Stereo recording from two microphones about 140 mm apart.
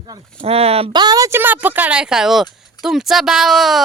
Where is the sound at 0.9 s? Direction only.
30° right (ahead or behind); by 3.8 s centre (ahead or behind).